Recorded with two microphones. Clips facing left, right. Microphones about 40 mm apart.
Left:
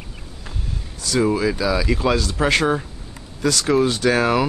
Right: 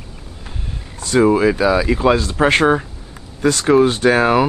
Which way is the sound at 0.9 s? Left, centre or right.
Right.